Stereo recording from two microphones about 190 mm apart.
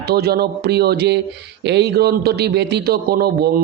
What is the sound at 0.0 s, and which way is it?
A man's voice, 55° right (ahead or behind).